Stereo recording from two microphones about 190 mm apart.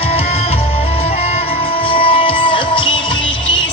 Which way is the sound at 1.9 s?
30° left (ahead or behind).